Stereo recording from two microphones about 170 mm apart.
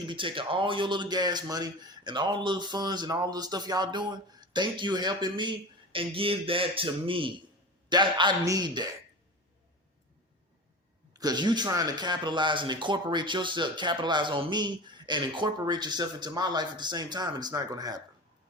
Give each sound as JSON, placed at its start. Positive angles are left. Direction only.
{"t": 0.0, "sound": "speech", "side_deg": -30}
{"t": 11.1, "sound": "speech", "side_deg": -25}